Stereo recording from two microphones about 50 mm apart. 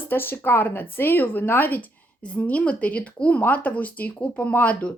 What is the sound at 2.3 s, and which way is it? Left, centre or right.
Speech, left.